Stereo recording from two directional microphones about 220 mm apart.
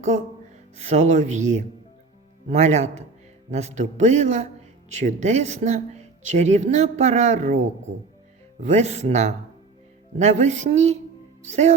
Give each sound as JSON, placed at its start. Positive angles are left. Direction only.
{"t": 0.8, "sound": "speech", "side_deg": -30}
{"t": 2.5, "sound": "speech", "side_deg": -30}
{"t": 8.7, "sound": "speech", "side_deg": -30}